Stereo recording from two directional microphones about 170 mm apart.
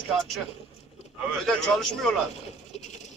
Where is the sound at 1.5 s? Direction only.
5° left (ahead or behind).